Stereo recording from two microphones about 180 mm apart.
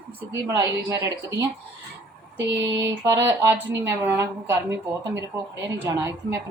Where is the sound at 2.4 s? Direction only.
85° right.